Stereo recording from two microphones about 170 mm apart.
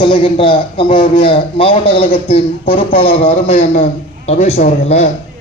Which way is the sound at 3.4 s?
45° left (ahead or behind).